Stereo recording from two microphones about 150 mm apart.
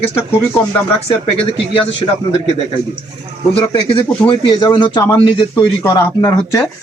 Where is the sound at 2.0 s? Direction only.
30° right (ahead or behind).